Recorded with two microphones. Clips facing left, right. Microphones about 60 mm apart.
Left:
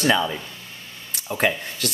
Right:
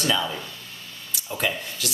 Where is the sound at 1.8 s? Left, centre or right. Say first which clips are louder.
Left 4 dB; left.